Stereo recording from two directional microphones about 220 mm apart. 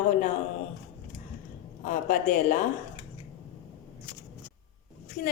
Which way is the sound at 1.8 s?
35° left (ahead or behind).